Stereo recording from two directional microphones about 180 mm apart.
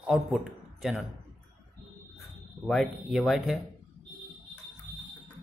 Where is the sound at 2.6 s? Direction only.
Centre (ahead or behind).